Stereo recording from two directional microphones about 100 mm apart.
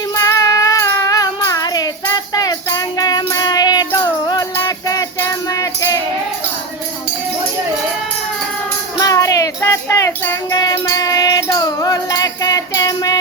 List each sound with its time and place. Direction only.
0.2 s child singing: 30° left (ahead or behind)
2.3 s music: 40° left (ahead or behind)
5.5 s music: 35° left (ahead or behind)
9.0 s music: 35° left (ahead or behind)